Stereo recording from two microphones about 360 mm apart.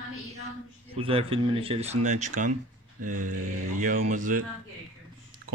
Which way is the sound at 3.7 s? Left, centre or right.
Right.